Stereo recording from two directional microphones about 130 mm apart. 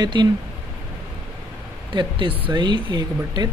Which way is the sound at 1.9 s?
35° right (ahead or behind).